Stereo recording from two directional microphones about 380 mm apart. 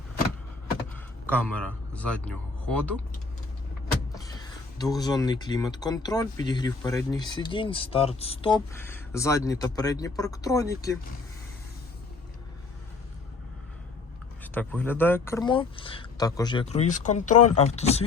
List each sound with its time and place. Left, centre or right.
1.3 s speech: centre
4.9 s speech: centre
14.4 s speech: centre